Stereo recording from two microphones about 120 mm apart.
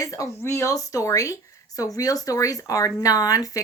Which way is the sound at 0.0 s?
30° left (ahead or behind).